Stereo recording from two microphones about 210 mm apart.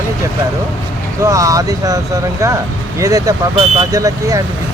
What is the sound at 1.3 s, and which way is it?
Speech, 15° right (ahead or behind).